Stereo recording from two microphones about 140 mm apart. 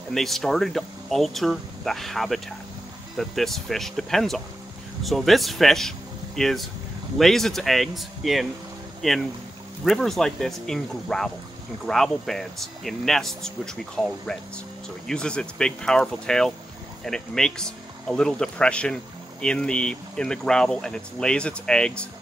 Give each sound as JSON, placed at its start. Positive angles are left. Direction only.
{"t": 0.1, "sound": "speech", "side_deg": 0}